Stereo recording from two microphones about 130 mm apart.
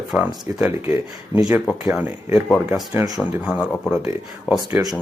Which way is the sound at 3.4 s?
5° right (ahead or behind).